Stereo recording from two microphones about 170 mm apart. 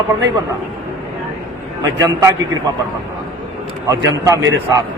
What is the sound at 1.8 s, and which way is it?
Speech, 20° right (ahead or behind).